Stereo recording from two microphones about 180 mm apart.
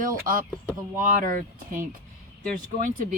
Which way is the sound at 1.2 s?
50° right (ahead or behind).